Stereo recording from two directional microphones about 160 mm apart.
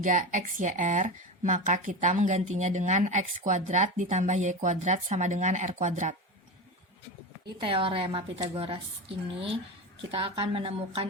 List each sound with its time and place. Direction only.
0.0 s speech: 50° right (ahead or behind)
7.6 s a woman's voice: 35° right (ahead or behind)